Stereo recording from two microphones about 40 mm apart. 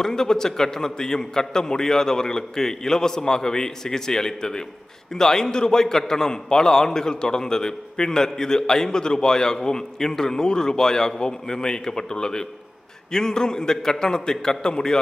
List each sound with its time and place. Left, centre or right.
0.0 s a man's voice: centre